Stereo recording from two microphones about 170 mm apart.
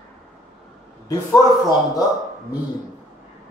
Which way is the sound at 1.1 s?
20° left (ahead or behind).